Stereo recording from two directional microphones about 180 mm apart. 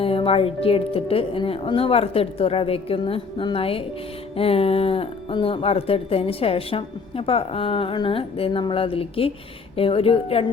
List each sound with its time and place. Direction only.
0.0 s speech: 30° left (ahead or behind)